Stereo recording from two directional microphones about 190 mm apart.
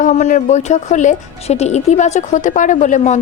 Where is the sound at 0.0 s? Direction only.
40° left (ahead or behind).